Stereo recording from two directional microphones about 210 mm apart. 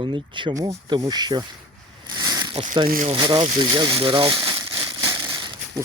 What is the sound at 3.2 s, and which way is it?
Speech, 20° right (ahead or behind).